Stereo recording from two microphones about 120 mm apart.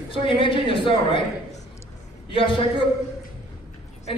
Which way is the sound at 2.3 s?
45° left (ahead or behind).